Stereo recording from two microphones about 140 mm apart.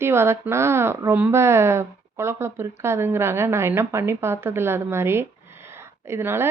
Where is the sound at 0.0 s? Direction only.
20° right (ahead or behind).